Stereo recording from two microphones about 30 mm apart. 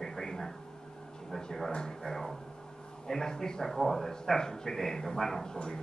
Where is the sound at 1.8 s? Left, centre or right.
Centre.